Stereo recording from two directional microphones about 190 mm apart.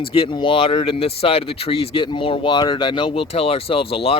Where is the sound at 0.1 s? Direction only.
25° left (ahead or behind).